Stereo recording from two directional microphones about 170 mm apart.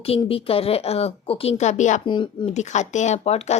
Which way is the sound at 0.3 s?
35° left (ahead or behind).